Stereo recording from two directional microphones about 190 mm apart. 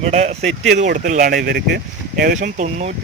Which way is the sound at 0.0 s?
35° right (ahead or behind).